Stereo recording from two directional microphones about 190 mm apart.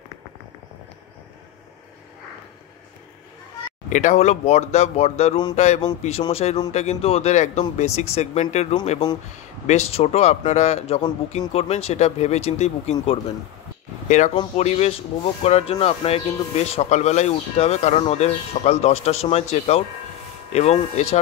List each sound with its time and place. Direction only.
3.9 s speech: 40° left (ahead or behind)
14.0 s speech: 40° left (ahead or behind)